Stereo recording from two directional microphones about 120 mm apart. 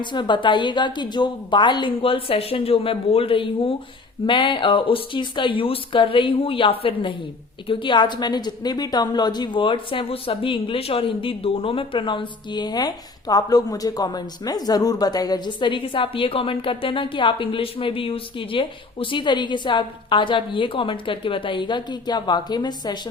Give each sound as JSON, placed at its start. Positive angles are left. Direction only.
{"t": 0.0, "sound": "a woman's voice", "side_deg": 40}